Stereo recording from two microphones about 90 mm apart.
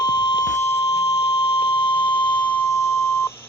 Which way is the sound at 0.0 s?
50° left (ahead or behind).